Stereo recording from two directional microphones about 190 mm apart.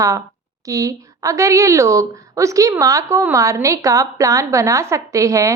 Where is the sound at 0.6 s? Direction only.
15° right (ahead or behind).